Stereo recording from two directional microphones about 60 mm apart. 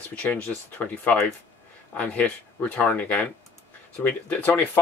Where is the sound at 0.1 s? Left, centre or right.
Left.